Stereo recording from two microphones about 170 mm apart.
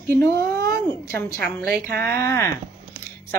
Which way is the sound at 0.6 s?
65° right (ahead or behind).